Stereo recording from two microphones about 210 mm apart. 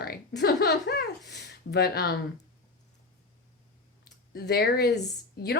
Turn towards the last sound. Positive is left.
turn(degrees=50)  # may be behind; listen again after turning